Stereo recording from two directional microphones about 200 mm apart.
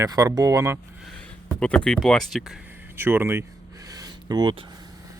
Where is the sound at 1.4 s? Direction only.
5° left (ahead or behind).